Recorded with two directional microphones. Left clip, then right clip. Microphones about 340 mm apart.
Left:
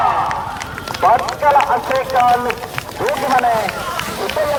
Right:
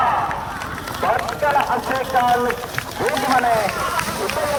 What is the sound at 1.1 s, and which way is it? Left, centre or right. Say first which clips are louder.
Speech: left 6 dB; centre.